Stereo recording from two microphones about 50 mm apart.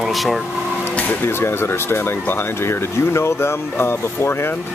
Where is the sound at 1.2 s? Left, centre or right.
Left.